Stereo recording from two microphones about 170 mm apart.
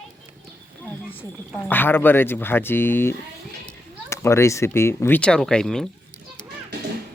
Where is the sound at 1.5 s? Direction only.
10° left (ahead or behind).